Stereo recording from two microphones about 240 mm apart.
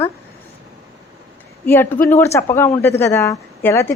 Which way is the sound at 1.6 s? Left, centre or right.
Centre.